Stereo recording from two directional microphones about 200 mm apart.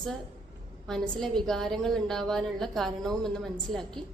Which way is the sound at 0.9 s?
Centre (ahead or behind).